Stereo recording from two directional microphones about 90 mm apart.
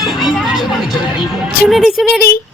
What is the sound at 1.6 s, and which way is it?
Speech, centre (ahead or behind).